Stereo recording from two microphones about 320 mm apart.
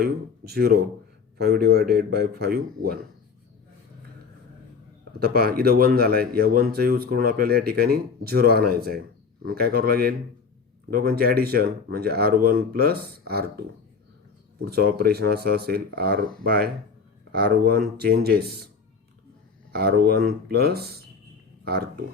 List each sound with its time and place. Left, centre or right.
0.0 s speech: right
5.2 s speech: right
14.6 s speech: right
19.7 s speech: right